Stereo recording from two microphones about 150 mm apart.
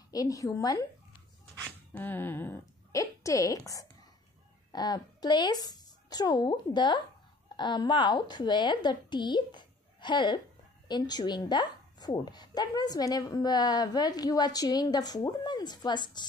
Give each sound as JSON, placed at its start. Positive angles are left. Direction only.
{"t": 0.1, "sound": "speech", "side_deg": 25}
{"t": 1.6, "sound": "a woman's voice", "side_deg": 10}